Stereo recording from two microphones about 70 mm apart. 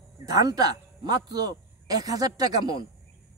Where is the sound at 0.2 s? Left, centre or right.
Right.